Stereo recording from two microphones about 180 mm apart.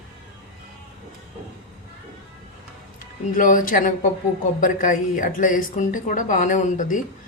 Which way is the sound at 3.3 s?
50° left (ahead or behind).